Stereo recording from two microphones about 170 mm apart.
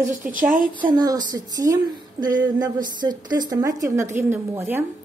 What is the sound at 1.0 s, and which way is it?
A woman's voice, 25° right (ahead or behind).